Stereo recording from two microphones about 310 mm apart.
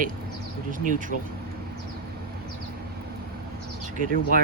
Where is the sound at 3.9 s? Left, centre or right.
Right.